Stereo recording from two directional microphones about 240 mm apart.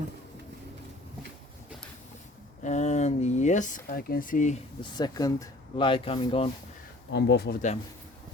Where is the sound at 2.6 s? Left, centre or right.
Left.